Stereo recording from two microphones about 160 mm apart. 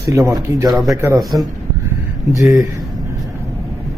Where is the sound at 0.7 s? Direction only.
Centre (ahead or behind).